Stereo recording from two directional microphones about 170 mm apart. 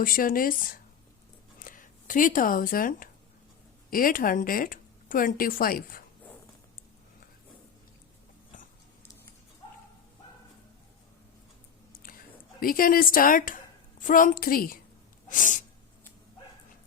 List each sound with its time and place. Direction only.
0.0 s speech: 55° left (ahead or behind)
12.0 s speech: 60° left (ahead or behind)
15.3 s sneeze: 50° left (ahead or behind)